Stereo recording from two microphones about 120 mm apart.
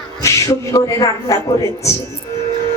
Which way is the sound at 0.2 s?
25° left (ahead or behind).